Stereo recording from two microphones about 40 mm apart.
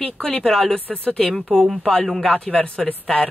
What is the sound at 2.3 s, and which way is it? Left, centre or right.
Speech, left.